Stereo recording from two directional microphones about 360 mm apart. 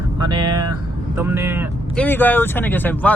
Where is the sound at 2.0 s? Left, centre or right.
Centre.